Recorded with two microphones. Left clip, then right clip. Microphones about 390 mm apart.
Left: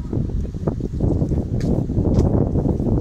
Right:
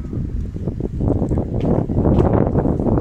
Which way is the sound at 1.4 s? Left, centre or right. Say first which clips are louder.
Right 4 dB; right.